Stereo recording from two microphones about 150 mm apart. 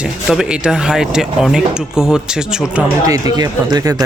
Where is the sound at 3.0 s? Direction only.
25° right (ahead or behind).